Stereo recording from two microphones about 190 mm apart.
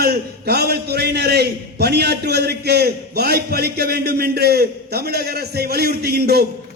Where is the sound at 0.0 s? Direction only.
55° right (ahead or behind).